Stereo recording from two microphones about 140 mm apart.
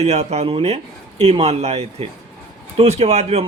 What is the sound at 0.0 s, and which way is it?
A man's voice, 50° right (ahead or behind).